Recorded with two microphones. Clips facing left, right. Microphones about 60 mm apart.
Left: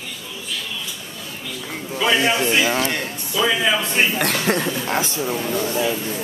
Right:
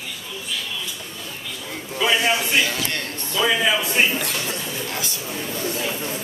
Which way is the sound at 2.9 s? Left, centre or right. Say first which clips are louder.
Left 2 dB; centre.